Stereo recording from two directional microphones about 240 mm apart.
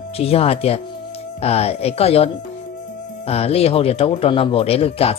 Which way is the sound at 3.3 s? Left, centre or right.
Left.